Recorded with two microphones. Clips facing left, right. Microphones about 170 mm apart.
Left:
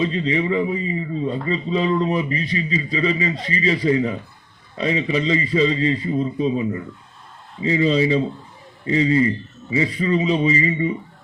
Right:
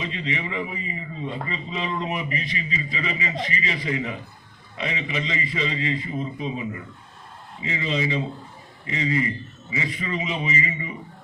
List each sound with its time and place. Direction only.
0.0 s speech: 35° left (ahead or behind)